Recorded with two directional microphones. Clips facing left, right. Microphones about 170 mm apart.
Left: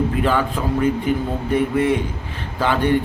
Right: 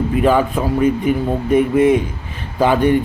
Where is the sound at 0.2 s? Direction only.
15° right (ahead or behind).